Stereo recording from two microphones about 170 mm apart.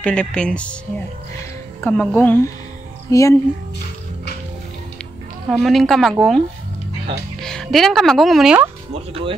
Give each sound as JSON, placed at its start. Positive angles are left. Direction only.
{"t": 0.0, "sound": "a woman's voice", "side_deg": 5}
{"t": 1.8, "sound": "speech", "side_deg": 10}
{"t": 5.5, "sound": "a woman's voice", "side_deg": 0}
{"t": 7.4, "sound": "a woman's voice", "side_deg": 5}